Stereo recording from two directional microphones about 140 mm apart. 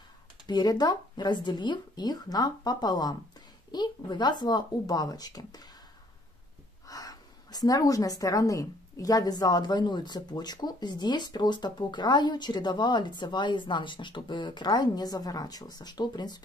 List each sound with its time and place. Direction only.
0.5 s speech: 30° left (ahead or behind)
6.9 s speech: 25° left (ahead or behind)